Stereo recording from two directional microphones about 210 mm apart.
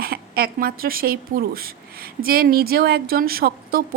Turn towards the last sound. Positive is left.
turn(degrees=-45)  # may be behind; listen again after turning